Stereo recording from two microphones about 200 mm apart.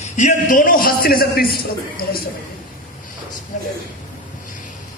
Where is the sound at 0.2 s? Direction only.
40° left (ahead or behind).